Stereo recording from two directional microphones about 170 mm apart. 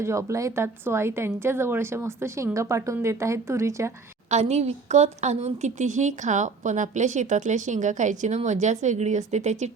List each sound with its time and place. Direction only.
0.0 s a woman's voice: 20° right (ahead or behind)
4.3 s speech: 40° right (ahead or behind)